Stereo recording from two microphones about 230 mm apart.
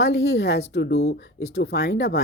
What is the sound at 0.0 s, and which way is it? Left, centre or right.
Speech, left.